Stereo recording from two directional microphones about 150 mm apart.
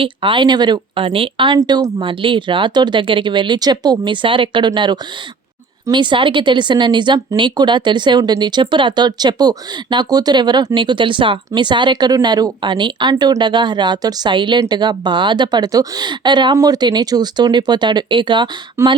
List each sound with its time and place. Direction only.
0.0 s a woman's voice: 35° right (ahead or behind)
18.8 s speech: 20° right (ahead or behind)